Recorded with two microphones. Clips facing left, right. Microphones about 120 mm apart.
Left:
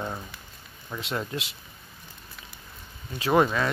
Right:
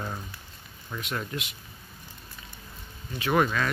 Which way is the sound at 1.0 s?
25° left (ahead or behind).